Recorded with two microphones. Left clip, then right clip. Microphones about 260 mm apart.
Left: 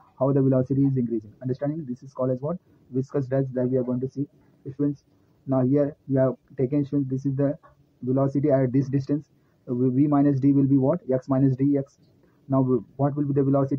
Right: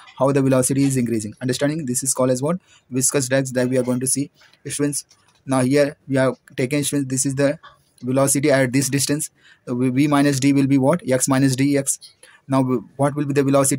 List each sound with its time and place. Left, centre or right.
0.2 s speech: right
5.5 s speech: right
6.6 s speech: right
7.1 s speech: right
8.9 s speech: right
9.7 s speech: right
10.2 s speech: right
10.5 s speech: right